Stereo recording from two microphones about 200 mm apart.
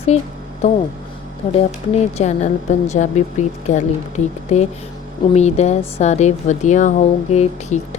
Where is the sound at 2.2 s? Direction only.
35° left (ahead or behind).